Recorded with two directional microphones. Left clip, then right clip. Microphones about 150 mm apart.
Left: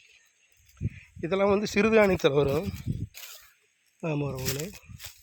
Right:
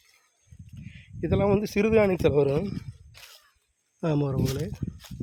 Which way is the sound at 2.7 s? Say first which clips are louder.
Left 2 dB; 90° left.